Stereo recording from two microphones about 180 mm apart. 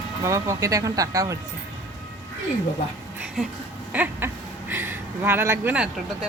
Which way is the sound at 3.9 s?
10° right (ahead or behind).